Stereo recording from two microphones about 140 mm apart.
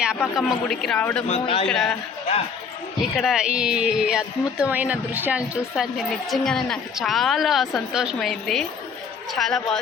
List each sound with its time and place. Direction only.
0.3 s a woman's voice: centre (ahead or behind)
0.9 s speech: 15° left (ahead or behind)
1.3 s a man's voice: 45° left (ahead or behind)
1.6 s a woman's voice: 5° left (ahead or behind)
3.0 s a woman's voice: centre (ahead or behind)